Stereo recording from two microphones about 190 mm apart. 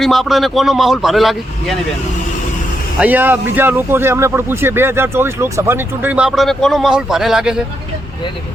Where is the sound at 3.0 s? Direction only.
10° right (ahead or behind).